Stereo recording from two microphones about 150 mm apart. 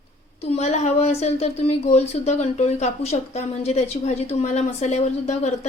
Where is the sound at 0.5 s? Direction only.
50° left (ahead or behind).